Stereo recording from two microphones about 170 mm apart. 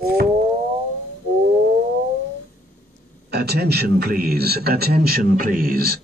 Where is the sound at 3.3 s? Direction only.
70° right (ahead or behind).